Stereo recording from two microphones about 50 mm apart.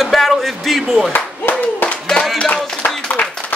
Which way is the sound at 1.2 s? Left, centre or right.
Left.